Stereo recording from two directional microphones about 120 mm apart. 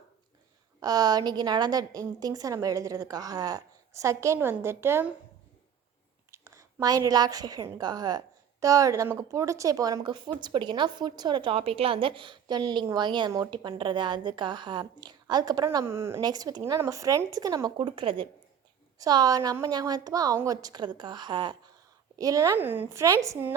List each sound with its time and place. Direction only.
0.8 s a woman's voice: 30° right (ahead or behind)
6.3 s a woman's voice: 25° right (ahead or behind)
16.2 s a woman's voice: 35° right (ahead or behind)
18.9 s a woman's voice: 30° right (ahead or behind)
22.2 s speech: 30° right (ahead or behind)